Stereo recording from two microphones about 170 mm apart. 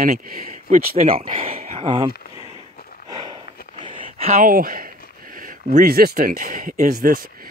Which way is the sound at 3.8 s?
30° right (ahead or behind).